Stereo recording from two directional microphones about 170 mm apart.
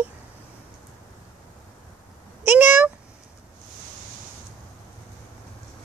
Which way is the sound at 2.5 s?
10° right (ahead or behind).